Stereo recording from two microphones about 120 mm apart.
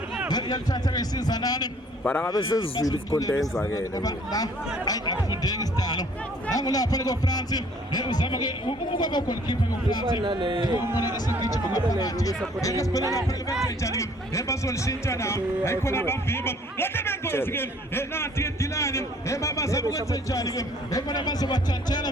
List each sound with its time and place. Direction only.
0.3 s a man's voice: 35° left (ahead or behind)
2.4 s speech: 45° left (ahead or behind)
3.1 s a man's voice: 30° left (ahead or behind)
10.1 s a man's voice: 40° right (ahead or behind)
10.9 s a man's voice: 30° left (ahead or behind)